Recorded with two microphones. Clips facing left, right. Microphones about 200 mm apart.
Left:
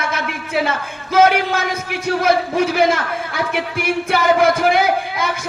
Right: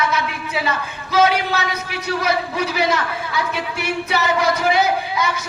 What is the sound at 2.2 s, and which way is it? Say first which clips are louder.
A man's voice: left 6 dB; 50° left (ahead or behind).